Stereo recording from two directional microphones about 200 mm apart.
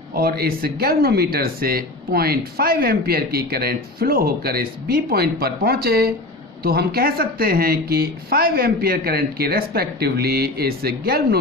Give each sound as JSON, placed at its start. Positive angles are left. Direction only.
{"t": 0.1, "sound": "speech", "side_deg": -50}